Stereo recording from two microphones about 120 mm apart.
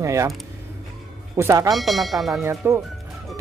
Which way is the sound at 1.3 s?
25° right (ahead or behind).